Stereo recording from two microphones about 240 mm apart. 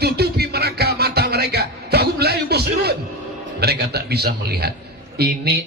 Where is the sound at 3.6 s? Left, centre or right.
Right.